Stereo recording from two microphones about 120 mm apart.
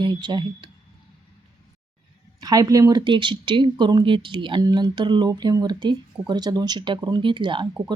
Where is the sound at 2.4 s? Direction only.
30° right (ahead or behind).